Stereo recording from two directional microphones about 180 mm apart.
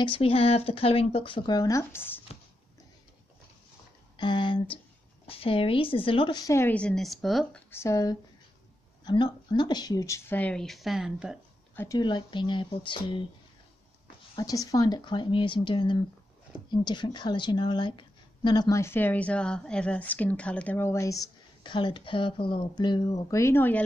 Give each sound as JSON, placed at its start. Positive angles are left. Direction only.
{"t": 0.0, "sound": "a woman's voice", "side_deg": 30}
{"t": 4.2, "sound": "a woman's voice", "side_deg": 25}
{"t": 7.7, "sound": "a woman's voice", "side_deg": 15}
{"t": 11.7, "sound": "speech", "side_deg": 10}
{"t": 12.0, "sound": "a woman's voice", "side_deg": 25}
{"t": 14.3, "sound": "a woman's voice", "side_deg": 20}